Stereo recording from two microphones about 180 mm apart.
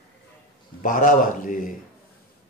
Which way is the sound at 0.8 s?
45° left (ahead or behind).